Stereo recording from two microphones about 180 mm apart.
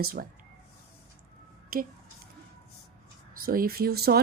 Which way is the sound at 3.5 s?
55° right (ahead or behind).